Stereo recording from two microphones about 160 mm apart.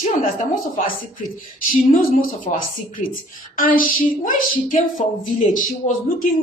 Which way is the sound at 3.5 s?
60° left (ahead or behind).